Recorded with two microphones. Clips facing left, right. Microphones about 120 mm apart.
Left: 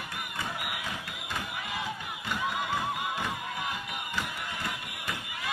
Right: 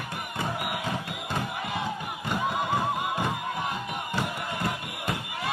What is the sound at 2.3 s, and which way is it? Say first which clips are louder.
Neigh: right 4 dB; 40° right (ahead or behind).